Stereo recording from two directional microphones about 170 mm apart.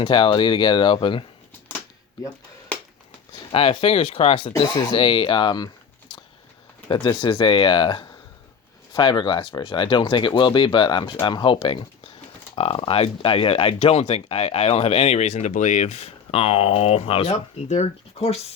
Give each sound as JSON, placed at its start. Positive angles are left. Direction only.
{"t": 0.0, "sound": "speech", "side_deg": 30}
{"t": 3.5, "sound": "speech", "side_deg": 35}
{"t": 6.9, "sound": "speech", "side_deg": 25}